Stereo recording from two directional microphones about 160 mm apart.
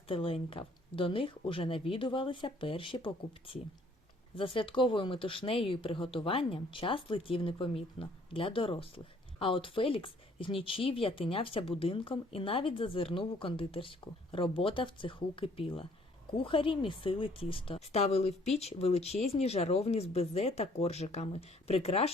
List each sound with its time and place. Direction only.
0.1 s speech: 35° left (ahead or behind)